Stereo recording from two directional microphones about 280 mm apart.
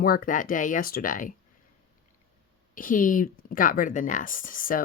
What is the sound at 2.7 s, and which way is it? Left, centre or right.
Speech, left.